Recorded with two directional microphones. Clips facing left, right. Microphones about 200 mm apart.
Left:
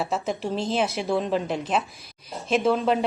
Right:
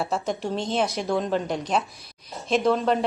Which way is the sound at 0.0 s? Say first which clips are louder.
Even; centre (ahead or behind).